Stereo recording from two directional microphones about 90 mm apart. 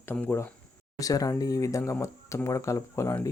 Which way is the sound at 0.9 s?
40° left (ahead or behind).